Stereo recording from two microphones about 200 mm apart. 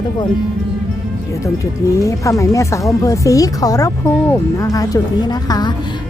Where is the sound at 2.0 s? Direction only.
15° left (ahead or behind).